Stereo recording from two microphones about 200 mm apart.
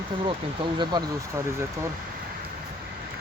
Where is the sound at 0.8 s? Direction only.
20° right (ahead or behind).